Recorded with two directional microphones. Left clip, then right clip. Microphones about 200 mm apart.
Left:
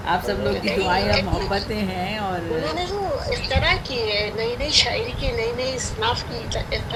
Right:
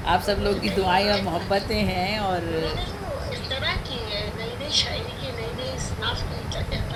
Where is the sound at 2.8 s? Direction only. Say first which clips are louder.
Left 7 dB; 35° left (ahead or behind).